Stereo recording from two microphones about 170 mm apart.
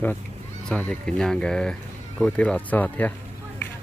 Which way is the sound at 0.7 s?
5° left (ahead or behind).